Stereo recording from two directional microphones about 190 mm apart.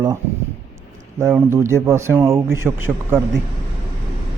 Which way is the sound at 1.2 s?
15° right (ahead or behind).